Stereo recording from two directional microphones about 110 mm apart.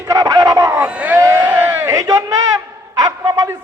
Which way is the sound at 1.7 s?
30° right (ahead or behind).